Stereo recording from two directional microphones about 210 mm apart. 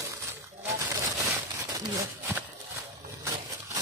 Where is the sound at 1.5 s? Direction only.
15° right (ahead or behind).